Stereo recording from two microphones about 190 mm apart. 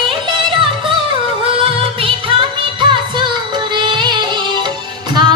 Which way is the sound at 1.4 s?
30° right (ahead or behind).